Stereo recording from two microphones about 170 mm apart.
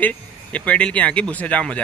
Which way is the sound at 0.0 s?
5° left (ahead or behind).